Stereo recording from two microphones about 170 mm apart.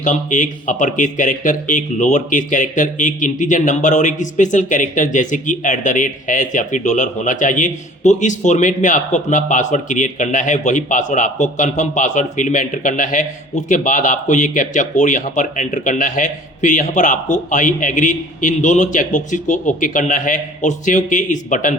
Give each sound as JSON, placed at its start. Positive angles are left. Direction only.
{"t": 0.0, "sound": "speech", "side_deg": 50}